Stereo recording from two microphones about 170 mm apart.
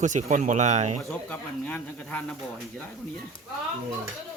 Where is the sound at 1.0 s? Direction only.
5° left (ahead or behind).